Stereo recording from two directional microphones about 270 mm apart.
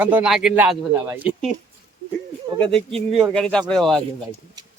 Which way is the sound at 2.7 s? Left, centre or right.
Centre.